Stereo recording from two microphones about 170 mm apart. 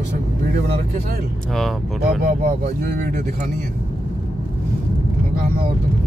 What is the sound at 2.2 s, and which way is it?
Speech, 55° right (ahead or behind).